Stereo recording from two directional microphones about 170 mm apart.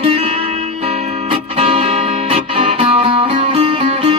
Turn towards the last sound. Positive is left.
turn(degrees=-30)  # may be behind; listen again after turning